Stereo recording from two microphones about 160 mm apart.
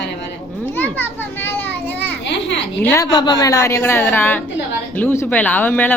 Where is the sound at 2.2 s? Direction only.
90° left.